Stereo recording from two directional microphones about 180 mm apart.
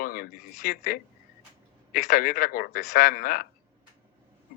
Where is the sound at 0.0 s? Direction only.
55° left (ahead or behind).